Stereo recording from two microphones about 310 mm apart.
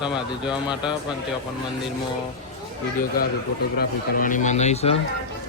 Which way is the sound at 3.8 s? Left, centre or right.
Left.